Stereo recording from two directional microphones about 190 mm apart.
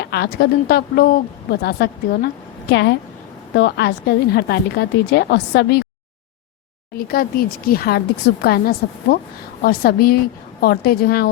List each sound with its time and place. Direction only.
0.0 s a woman's voice: 60° left (ahead or behind)
6.9 s a woman's voice: 50° left (ahead or behind)